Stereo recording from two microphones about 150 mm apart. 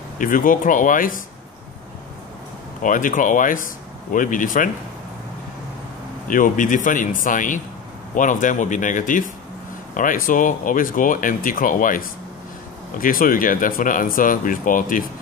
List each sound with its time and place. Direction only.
0.2 s speech: 65° left (ahead or behind)
2.8 s speech: 60° left (ahead or behind)
6.2 s speech: 65° left (ahead or behind)